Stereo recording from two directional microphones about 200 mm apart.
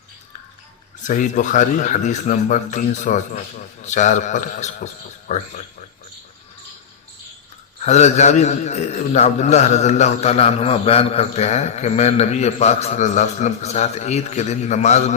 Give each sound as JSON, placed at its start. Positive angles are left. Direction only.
{"t": 1.0, "sound": "a man's voice", "side_deg": 40}
{"t": 7.8, "sound": "a man's voice", "side_deg": 35}